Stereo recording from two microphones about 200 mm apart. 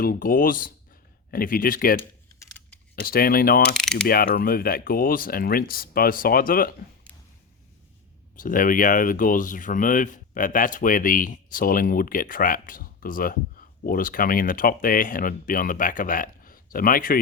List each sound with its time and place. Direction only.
0.0 s speech: 45° left (ahead or behind)
3.8 s mechanisms: centre (ahead or behind)
4.0 s speech: 50° left (ahead or behind)
8.4 s speech: 45° left (ahead or behind)